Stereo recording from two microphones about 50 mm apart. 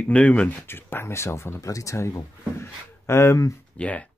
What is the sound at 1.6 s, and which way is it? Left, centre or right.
Speech, left.